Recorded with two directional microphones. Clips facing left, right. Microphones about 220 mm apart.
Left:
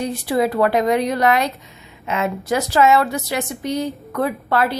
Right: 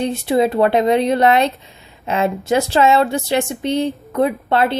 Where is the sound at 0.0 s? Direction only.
25° right (ahead or behind).